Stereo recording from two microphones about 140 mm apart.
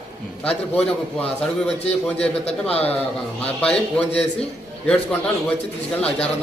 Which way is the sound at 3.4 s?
10° left (ahead or behind).